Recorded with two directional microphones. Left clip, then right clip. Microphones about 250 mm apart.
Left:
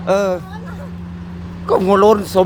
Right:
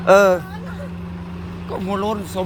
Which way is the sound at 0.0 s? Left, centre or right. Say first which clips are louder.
Right 4 dB; centre.